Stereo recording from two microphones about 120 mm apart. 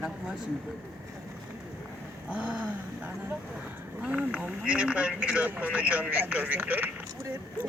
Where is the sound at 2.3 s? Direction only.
10° right (ahead or behind).